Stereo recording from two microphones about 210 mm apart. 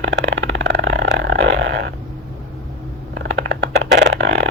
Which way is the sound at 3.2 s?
55° right (ahead or behind).